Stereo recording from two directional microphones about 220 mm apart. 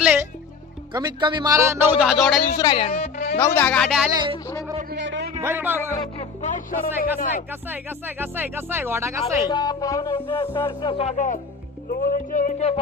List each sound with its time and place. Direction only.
0.0 s music: 5° right (ahead or behind)
0.9 s speech: 20° right (ahead or behind); by 2.4 s centre (ahead or behind)
2.6 s music: 20° left (ahead or behind)
2.9 s music: 35° left (ahead or behind)
3.3 s speech: 10° left (ahead or behind)
4.1 s a sound: 20° right (ahead or behind)
4.9 s a sound: 55° right (ahead or behind)
5.4 s a man's voice: 10° right (ahead or behind)
6.1 s music: 35° left (ahead or behind)
7.0 s speech: 40° left (ahead or behind)
7.7 s speech: 10° right (ahead or behind)
9.5 s music: 20° left (ahead or behind)
11.9 s speech: 40° left (ahead or behind)